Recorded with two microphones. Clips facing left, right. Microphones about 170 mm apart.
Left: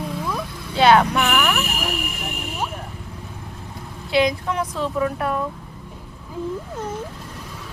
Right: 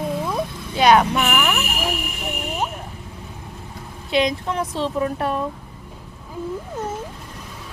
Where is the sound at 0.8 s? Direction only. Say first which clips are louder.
Even; 15° right (ahead or behind).